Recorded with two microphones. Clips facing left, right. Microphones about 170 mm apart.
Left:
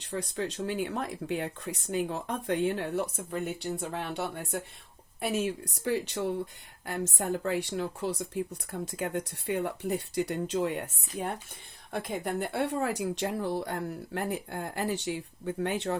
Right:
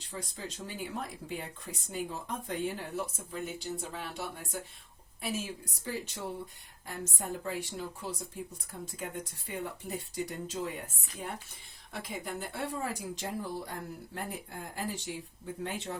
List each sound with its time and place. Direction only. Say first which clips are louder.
0.0 s speech: left 8 dB; 70° left (ahead or behind)
11.9 s speech: left 7 dB; 55° left (ahead or behind); by 16.0 s 70° left (ahead or behind)